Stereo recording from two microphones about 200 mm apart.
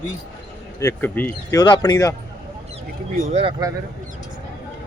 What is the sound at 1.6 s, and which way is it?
Speech, 20° left (ahead or behind).